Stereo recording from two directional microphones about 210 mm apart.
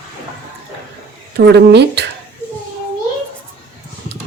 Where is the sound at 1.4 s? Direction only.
50° right (ahead or behind).